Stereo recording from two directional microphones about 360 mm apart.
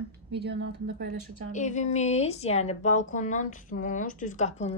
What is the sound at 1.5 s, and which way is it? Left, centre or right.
Speech, centre.